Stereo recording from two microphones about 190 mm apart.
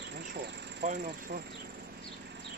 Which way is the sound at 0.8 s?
45° right (ahead or behind).